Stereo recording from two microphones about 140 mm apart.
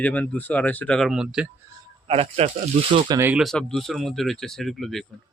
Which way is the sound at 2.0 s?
45° right (ahead or behind).